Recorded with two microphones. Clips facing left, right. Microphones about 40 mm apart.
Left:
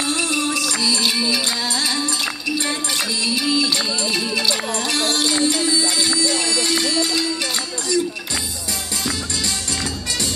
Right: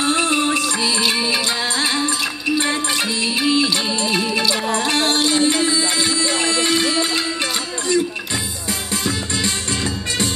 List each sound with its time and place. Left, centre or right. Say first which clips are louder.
0.0 s music: right 4 dB; right